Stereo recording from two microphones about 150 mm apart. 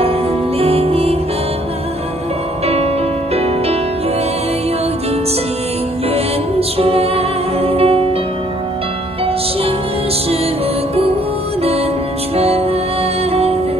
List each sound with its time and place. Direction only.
0.6 s music: 40° right (ahead or behind)
2.6 s music: 40° right (ahead or behind)
6.8 s music: 40° right (ahead or behind)
12.4 s music: 40° right (ahead or behind)